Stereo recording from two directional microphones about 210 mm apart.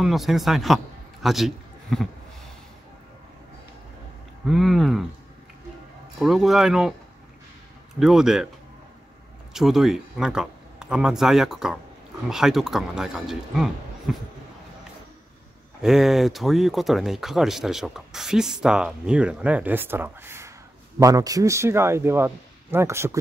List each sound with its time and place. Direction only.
0.0 s speech: centre (ahead or behind)
1.2 s a sound: centre (ahead or behind)
4.5 s speech: centre (ahead or behind)
6.1 s speech: centre (ahead or behind)
8.0 s speech: centre (ahead or behind)
9.5 s speech: centre (ahead or behind)
15.8 s a man's voice: centre (ahead or behind)